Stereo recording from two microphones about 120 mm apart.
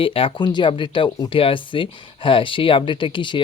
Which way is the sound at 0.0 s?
50° left (ahead or behind).